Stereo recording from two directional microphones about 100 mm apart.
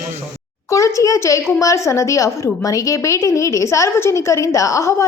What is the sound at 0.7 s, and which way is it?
A woman's voice, 30° left (ahead or behind).